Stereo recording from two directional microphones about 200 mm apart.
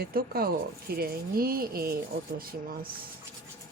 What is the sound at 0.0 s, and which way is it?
Speech, 50° right (ahead or behind).